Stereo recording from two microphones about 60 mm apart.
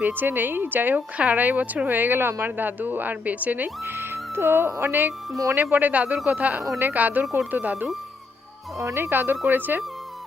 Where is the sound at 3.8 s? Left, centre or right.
Right.